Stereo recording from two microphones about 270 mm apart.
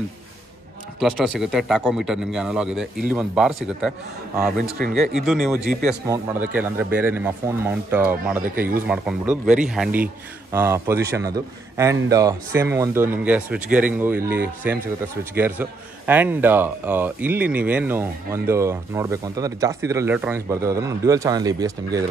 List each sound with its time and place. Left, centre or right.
0.9 s speech: centre
4.7 s speech: right
5.1 s a man's voice: centre